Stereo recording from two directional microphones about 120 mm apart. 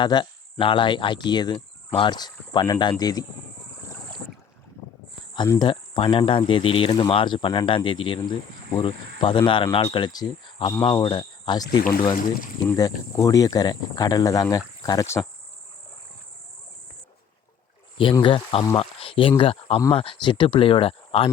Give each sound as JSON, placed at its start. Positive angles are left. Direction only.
{"t": 0.0, "sound": "speech", "side_deg": 40}
{"t": 5.5, "sound": "speech", "side_deg": 40}
{"t": 17.9, "sound": "speech", "side_deg": 45}